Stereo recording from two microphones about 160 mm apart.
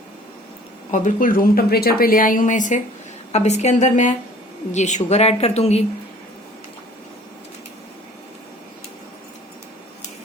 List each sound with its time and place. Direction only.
0.9 s a woman's voice: 50° left (ahead or behind)